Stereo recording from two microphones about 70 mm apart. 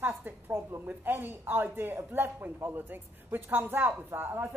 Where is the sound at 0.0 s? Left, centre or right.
Right.